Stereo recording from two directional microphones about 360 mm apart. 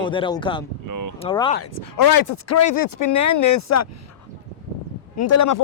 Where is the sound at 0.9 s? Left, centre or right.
Right.